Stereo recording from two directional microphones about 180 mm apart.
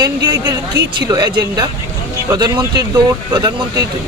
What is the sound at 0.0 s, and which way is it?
Speech, 20° right (ahead or behind).